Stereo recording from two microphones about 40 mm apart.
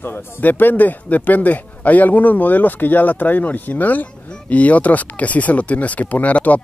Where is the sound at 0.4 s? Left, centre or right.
Left.